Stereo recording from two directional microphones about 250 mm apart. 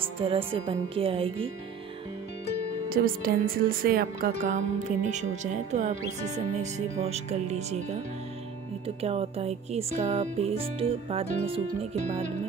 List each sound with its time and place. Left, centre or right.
0.2 s speech: right
2.9 s speech: right